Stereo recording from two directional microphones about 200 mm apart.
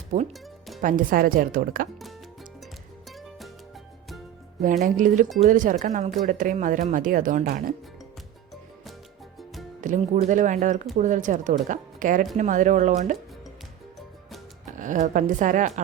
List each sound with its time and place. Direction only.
0.1 s speech: 40° right (ahead or behind)
4.8 s speech: 40° right (ahead or behind)
9.8 s speech: 40° right (ahead or behind)
14.8 s speech: 40° right (ahead or behind)